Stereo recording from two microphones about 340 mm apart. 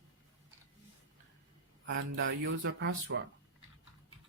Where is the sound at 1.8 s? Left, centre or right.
Right.